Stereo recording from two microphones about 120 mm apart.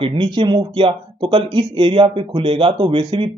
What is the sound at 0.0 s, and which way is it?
Speech, 50° right (ahead or behind).